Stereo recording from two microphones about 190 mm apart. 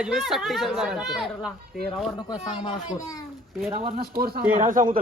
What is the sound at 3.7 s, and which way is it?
Speech, 30° right (ahead or behind).